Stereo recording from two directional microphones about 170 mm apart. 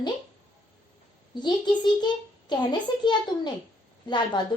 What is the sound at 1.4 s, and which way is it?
A child's voice, 25° left (ahead or behind).